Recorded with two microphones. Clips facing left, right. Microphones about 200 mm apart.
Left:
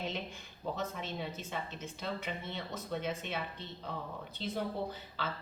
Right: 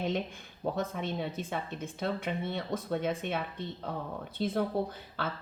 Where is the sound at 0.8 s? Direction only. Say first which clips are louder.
Right 6 dB; 55° right (ahead or behind).